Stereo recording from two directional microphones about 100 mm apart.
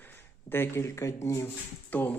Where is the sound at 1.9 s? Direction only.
15° left (ahead or behind).